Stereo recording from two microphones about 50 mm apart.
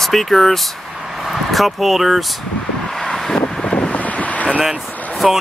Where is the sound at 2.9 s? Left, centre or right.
Centre.